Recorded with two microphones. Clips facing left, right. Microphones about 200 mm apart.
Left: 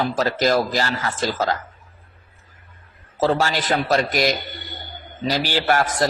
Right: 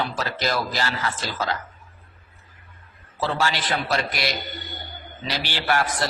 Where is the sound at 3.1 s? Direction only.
45° left (ahead or behind).